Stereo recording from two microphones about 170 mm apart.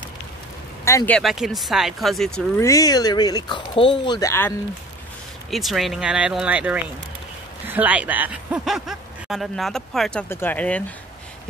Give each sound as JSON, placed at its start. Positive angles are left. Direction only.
{"t": 0.8, "sound": "speech", "side_deg": 15}
{"t": 1.1, "sound": "speech", "side_deg": 0}
{"t": 2.6, "sound": "speech", "side_deg": 20}
{"t": 4.3, "sound": "speech", "side_deg": 15}
{"t": 5.5, "sound": "speech", "side_deg": 0}